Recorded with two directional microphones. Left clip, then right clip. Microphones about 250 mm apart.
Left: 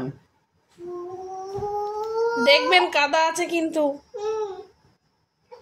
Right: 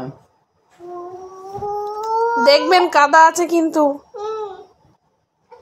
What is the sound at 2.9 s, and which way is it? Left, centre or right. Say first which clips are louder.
Speech: right 10 dB; centre.